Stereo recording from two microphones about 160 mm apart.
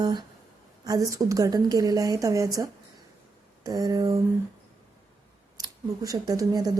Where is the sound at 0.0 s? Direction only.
30° right (ahead or behind).